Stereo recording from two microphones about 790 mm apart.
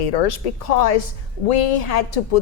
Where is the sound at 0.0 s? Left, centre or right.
Left.